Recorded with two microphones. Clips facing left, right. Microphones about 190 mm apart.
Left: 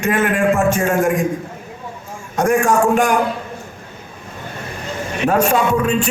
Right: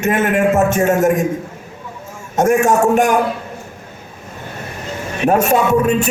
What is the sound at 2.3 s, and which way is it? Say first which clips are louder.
Speech: right 2 dB; 25° right (ahead or behind).